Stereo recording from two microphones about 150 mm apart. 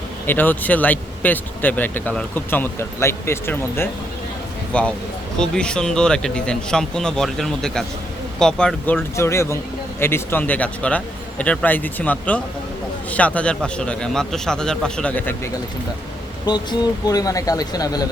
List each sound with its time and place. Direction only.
0.3 s speech: 10° left (ahead or behind)
9.1 s speech: 20° left (ahead or behind)
16.5 s speech: 25° left (ahead or behind)